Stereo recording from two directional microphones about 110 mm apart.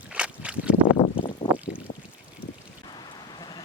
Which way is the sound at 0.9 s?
70° left (ahead or behind).